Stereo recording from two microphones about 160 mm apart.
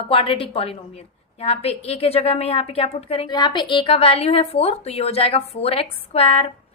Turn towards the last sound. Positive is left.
turn(degrees=35)  # may be behind; listen again after turning